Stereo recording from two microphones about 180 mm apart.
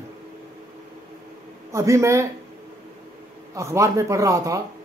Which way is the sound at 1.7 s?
15° right (ahead or behind).